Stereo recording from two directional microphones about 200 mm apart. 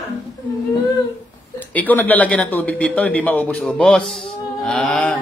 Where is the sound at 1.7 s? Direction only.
10° left (ahead or behind).